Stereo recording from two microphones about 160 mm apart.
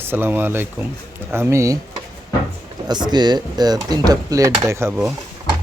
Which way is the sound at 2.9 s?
25° right (ahead or behind).